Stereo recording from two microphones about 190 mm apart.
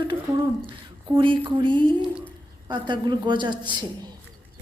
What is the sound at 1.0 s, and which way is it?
A woman's voice, 25° right (ahead or behind).